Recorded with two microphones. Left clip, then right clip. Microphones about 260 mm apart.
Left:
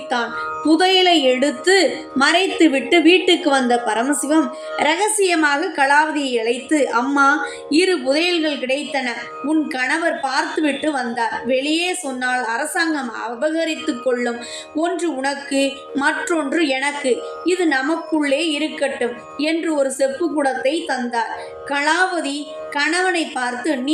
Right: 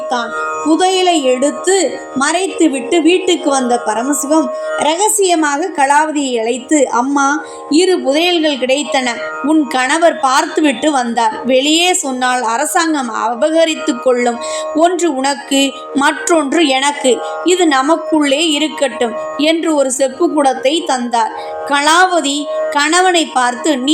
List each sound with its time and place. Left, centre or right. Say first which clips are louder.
0.7 s a woman's voice: right 2 dB; centre